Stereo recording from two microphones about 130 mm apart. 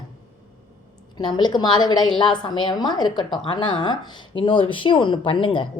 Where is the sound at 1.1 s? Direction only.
35° left (ahead or behind).